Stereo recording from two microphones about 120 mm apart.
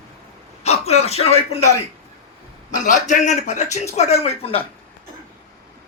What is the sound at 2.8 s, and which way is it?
Speech, 90° left.